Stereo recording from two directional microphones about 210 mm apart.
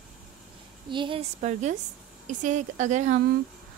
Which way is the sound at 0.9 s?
25° right (ahead or behind).